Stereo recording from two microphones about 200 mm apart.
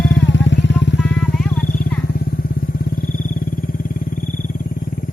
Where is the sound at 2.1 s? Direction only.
50° left (ahead or behind).